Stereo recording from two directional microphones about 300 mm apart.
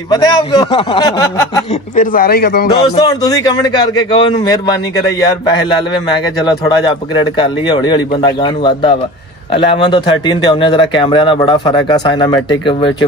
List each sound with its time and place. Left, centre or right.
0.1 s a man's voice: centre
2.0 s speech: left
3.0 s a man's voice: centre
7.7 s a man's voice: centre